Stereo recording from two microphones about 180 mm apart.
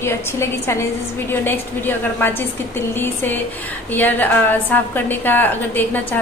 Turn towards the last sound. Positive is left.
turn(degrees=10)  # may be behind; listen again after turning